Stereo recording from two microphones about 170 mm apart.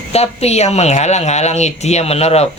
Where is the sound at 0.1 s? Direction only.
40° left (ahead or behind).